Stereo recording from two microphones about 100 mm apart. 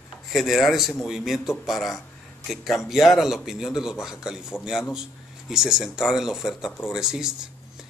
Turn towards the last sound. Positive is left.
turn(degrees=-5)  # may be behind; listen again after turning